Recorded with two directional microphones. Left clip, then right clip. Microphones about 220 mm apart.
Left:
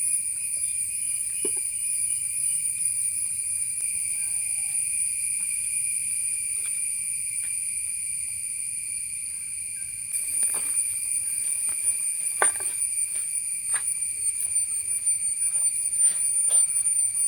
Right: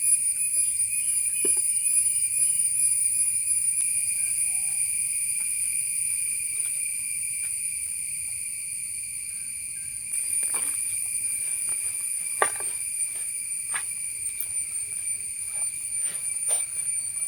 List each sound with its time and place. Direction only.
1.4 s jingle bell: 10° right (ahead or behind)
12.4 s a sound: 10° right (ahead or behind)
13.7 s cricket: 20° right (ahead or behind)